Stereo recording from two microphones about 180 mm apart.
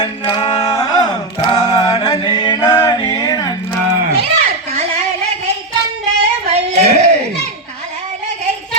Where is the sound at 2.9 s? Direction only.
25° left (ahead or behind).